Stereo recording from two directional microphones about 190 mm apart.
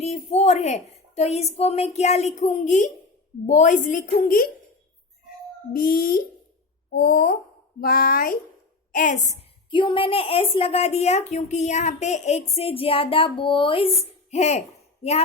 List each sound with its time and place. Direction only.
0.0 s a woman's voice: 35° left (ahead or behind)
5.7 s a woman's voice: 50° left (ahead or behind)
9.6 s a woman's voice: 25° left (ahead or behind)